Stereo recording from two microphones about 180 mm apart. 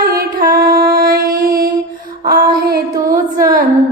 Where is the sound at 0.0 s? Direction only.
55° right (ahead or behind).